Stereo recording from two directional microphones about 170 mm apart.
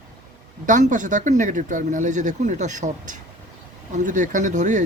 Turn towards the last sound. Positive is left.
turn(degrees=-45)  # may be behind; listen again after turning